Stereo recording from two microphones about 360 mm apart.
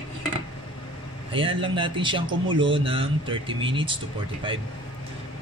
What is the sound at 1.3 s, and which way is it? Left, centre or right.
Speech, centre.